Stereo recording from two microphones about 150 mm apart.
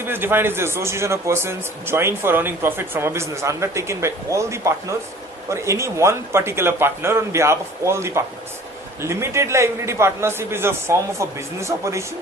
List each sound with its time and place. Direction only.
0.0 s a man's voice: 15° right (ahead or behind)